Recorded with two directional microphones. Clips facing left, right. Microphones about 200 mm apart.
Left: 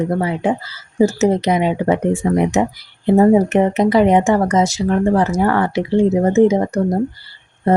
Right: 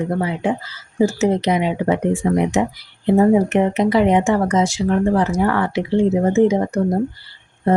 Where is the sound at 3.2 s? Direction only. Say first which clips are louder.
Left 2 dB; 40° left (ahead or behind).